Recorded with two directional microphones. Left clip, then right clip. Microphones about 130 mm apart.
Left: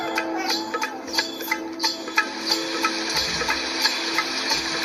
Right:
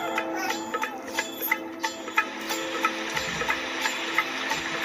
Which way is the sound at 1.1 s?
25° left (ahead or behind).